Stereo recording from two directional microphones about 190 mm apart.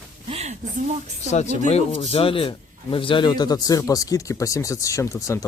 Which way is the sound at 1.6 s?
35° left (ahead or behind).